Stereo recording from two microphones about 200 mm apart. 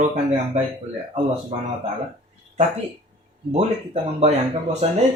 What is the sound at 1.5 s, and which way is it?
Speech, 30° right (ahead or behind).